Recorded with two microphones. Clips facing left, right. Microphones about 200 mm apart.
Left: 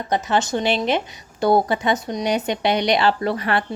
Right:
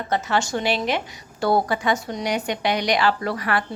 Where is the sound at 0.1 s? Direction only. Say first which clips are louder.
Left 2 dB; 20° left (ahead or behind).